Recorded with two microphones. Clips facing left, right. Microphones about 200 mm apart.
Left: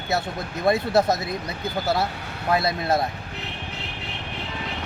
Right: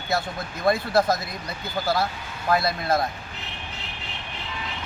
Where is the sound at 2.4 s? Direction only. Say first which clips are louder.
Left 1 dB; 25° left (ahead or behind).